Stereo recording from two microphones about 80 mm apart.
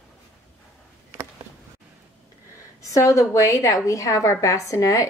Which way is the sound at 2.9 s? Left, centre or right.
Left.